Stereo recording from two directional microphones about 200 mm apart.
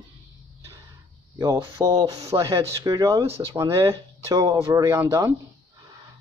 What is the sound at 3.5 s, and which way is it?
Speech, 15° right (ahead or behind).